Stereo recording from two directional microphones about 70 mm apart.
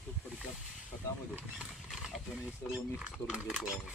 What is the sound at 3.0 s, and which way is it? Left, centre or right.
Speech, centre.